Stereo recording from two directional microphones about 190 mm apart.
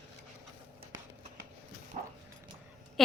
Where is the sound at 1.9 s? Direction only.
35° right (ahead or behind).